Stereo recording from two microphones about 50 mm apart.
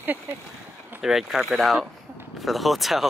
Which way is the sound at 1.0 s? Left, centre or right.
Centre.